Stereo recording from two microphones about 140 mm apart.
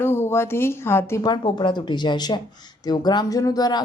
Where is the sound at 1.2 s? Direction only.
35° left (ahead or behind).